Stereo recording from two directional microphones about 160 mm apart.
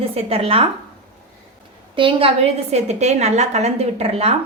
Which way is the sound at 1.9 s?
35° right (ahead or behind).